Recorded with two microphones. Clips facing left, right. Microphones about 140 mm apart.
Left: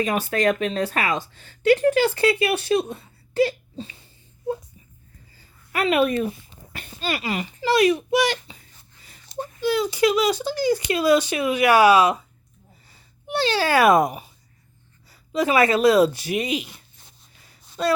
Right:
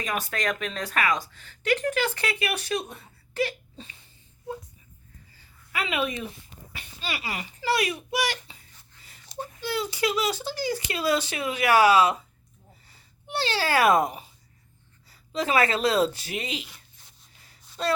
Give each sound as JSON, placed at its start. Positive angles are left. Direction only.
{"t": 0.0, "sound": "speech", "side_deg": 30}
{"t": 5.7, "sound": "speech", "side_deg": 55}
{"t": 6.7, "sound": "a sound", "side_deg": 50}
{"t": 7.3, "sound": "a child's voice", "side_deg": 25}